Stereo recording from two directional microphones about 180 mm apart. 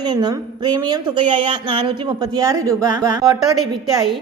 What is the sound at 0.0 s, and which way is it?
A woman's voice, 25° right (ahead or behind).